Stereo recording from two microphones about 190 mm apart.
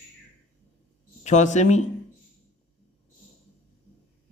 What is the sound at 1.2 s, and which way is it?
Speech, 40° left (ahead or behind).